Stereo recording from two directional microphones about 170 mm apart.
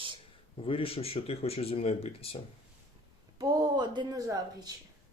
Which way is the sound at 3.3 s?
25° right (ahead or behind).